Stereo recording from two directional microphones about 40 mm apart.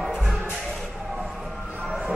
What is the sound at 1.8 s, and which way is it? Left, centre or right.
Music, centre.